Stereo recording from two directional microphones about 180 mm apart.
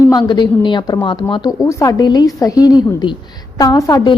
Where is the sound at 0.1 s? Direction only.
25° left (ahead or behind).